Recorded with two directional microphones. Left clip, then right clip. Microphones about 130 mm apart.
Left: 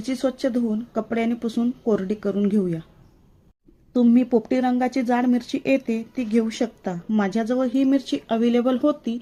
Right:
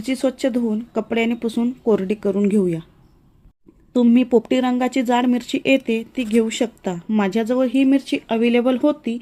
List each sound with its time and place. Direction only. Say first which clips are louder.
0.0 s speech: right 3 dB; 25° right (ahead or behind)
3.9 s speech: right 3 dB; 30° right (ahead or behind)